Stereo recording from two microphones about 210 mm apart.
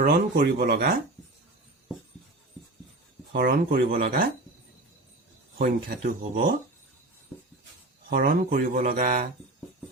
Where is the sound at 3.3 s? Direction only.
45° right (ahead or behind).